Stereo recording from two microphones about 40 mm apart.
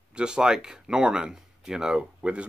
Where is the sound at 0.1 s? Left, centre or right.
Right.